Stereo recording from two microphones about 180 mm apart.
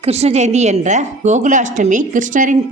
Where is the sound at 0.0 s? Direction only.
35° right (ahead or behind).